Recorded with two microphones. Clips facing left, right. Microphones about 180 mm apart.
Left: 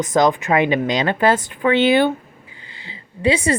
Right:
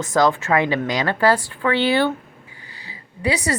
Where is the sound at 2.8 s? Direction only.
25° left (ahead or behind).